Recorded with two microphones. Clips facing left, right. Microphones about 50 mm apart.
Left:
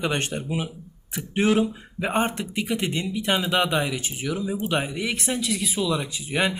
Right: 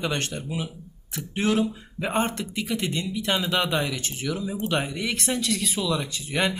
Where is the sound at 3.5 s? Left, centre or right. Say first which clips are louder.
Left 2 dB; centre.